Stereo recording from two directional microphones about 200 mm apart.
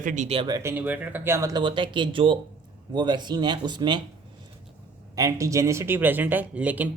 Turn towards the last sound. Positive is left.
turn(degrees=-10)  # may be behind; listen again after turning